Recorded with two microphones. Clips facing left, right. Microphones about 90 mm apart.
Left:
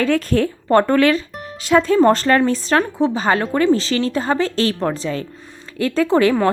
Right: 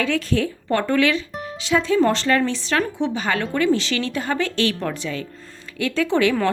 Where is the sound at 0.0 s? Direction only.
45° left (ahead or behind).